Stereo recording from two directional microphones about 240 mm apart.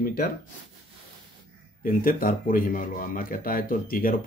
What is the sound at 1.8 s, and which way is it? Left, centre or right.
Speech, left.